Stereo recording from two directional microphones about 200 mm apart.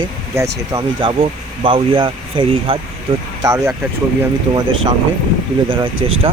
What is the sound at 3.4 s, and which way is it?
Speech, 15° right (ahead or behind).